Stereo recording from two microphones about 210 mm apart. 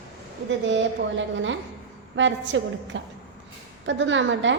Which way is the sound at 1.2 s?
65° right (ahead or behind).